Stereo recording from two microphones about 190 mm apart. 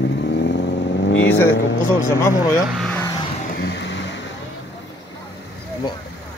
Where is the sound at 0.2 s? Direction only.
70° left (ahead or behind).